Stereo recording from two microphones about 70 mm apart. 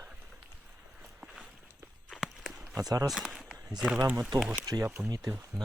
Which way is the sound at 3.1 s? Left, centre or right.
Centre.